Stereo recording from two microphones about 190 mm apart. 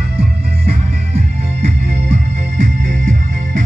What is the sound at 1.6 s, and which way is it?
Music, 35° right (ahead or behind).